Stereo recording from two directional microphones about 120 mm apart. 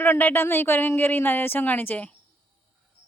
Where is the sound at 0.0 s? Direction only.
15° left (ahead or behind).